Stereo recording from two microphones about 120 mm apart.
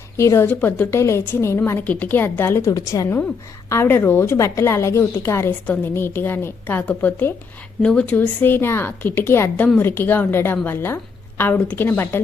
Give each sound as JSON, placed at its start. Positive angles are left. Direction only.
{"t": 0.2, "sound": "a woman's voice", "side_deg": 20}